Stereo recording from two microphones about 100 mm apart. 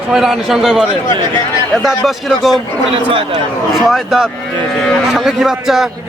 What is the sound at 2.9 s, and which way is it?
Speech, 70° right (ahead or behind).